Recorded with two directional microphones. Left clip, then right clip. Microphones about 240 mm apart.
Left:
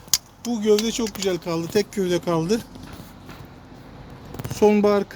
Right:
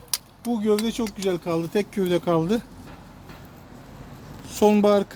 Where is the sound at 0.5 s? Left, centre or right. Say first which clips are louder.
Left 3 dB; right.